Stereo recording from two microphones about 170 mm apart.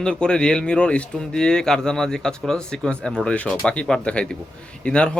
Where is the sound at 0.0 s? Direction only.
5° left (ahead or behind).